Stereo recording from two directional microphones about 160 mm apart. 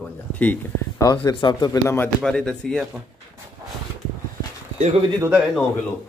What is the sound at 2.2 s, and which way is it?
Speech, 5° left (ahead or behind).